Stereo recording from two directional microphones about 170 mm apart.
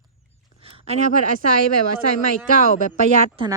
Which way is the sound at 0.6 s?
35° right (ahead or behind).